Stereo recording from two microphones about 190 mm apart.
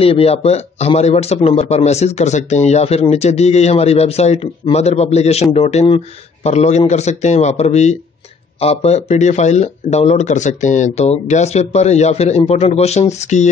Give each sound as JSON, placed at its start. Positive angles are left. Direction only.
{"t": 0.0, "sound": "a man's voice", "side_deg": 30}